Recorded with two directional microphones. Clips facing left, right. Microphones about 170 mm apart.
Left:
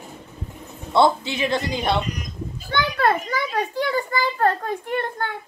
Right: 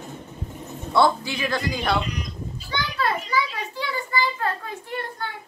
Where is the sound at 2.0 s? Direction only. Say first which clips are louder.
Left 1 dB; 45° left (ahead or behind).